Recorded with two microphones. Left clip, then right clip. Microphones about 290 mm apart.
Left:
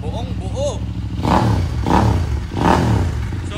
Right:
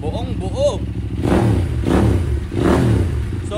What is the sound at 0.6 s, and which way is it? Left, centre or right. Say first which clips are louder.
Vehicle: right 5 dB; right.